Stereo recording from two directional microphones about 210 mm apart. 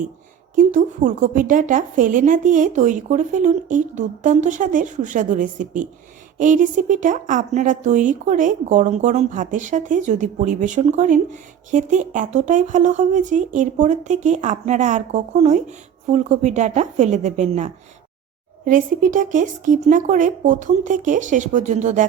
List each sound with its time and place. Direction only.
0.5 s a woman's voice: 40° right (ahead or behind)